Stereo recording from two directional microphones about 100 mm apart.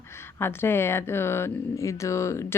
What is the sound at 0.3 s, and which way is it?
A woman's voice, 25° left (ahead or behind).